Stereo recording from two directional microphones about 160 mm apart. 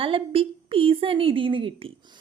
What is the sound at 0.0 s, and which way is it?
Speech, 35° right (ahead or behind).